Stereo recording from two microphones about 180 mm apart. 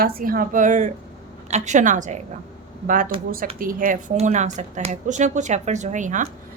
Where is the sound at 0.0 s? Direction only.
55° right (ahead or behind).